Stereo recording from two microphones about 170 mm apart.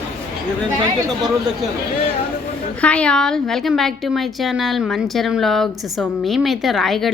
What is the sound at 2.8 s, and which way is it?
A woman's voice, 5° left (ahead or behind).